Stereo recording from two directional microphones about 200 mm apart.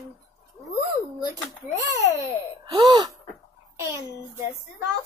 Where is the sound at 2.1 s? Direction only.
15° right (ahead or behind).